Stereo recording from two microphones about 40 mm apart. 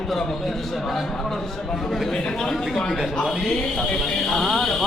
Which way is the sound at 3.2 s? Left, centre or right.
Centre.